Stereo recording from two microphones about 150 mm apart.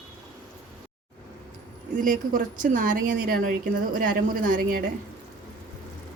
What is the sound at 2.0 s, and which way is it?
Speech, 60° right (ahead or behind).